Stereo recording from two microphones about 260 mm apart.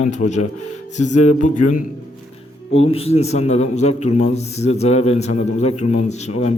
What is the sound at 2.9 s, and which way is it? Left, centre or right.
A man's voice, left.